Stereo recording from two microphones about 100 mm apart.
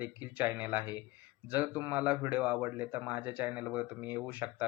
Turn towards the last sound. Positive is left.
turn(degrees=-15)  # may be behind; listen again after turning